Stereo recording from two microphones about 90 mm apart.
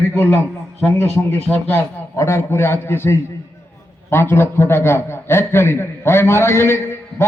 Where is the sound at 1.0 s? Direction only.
20° left (ahead or behind).